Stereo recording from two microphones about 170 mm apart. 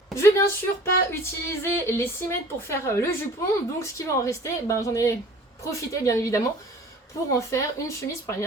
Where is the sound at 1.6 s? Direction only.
15° left (ahead or behind).